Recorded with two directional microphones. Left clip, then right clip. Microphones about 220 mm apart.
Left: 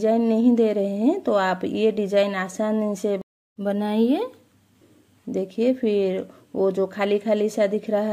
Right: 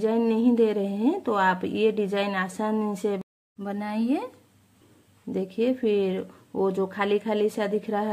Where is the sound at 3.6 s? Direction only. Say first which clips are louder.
Left 8 dB; 20° left (ahead or behind).